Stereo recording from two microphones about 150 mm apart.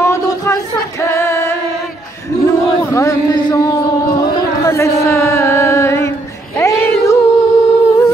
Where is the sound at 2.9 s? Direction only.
20° left (ahead or behind).